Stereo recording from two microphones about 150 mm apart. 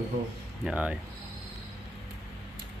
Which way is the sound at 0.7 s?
5° right (ahead or behind).